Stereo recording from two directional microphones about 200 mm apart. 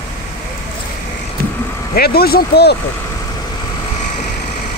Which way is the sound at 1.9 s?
50° left (ahead or behind).